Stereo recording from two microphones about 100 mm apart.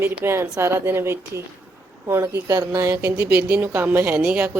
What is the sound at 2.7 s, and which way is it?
Speech, 35° right (ahead or behind).